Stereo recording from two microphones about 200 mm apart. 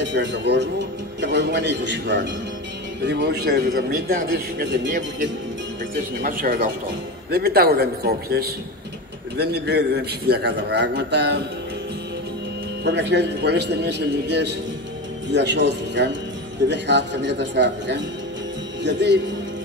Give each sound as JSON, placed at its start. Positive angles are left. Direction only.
{"t": 0.0, "sound": "a man's voice", "side_deg": -65}
{"t": 6.2, "sound": "a man's voice", "side_deg": -45}
{"t": 12.8, "sound": "a man's voice", "side_deg": -60}